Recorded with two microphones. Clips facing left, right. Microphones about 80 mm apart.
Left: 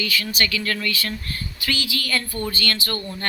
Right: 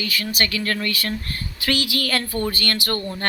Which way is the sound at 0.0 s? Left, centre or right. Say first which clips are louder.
Even; right.